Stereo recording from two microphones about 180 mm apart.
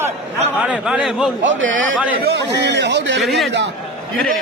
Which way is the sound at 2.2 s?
70° right (ahead or behind).